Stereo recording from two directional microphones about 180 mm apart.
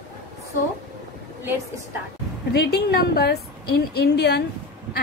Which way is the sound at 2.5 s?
65° left (ahead or behind).